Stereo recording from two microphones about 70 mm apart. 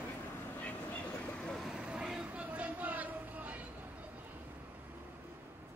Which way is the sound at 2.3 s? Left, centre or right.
Right.